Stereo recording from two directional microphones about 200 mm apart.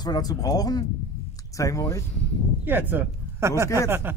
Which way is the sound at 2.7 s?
10° right (ahead or behind).